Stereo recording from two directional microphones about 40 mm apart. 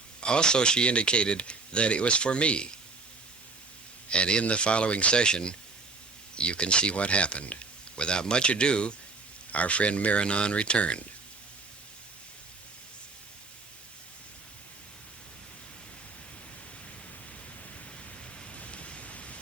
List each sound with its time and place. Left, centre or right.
0.2 s speech: left
4.1 s speech: left
9.5 s speech: left
18.7 s rain: left